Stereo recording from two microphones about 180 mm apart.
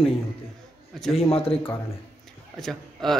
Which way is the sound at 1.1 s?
35° left (ahead or behind).